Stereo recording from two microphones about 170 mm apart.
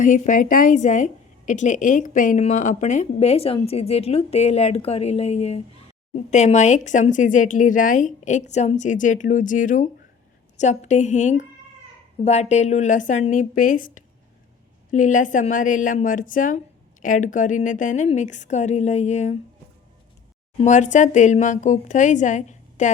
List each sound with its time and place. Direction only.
0.0 s a woman's voice: 50° left (ahead or behind)
20.6 s a woman's voice: 45° left (ahead or behind)